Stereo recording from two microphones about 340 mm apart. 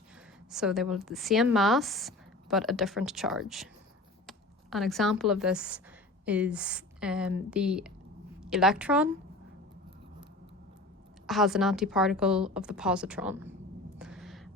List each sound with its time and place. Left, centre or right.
0.5 s a woman's voice: centre
11.3 s speech: centre
14.0 s a sound: centre